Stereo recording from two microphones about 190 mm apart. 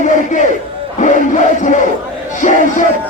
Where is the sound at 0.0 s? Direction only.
40° left (ahead or behind).